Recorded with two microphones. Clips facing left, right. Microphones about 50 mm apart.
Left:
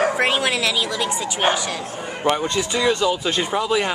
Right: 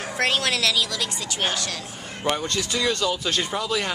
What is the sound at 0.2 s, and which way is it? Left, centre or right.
A man's voice, centre.